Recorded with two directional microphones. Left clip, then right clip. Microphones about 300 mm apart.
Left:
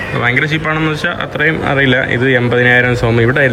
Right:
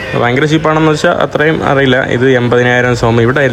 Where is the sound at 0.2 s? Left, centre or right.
Centre.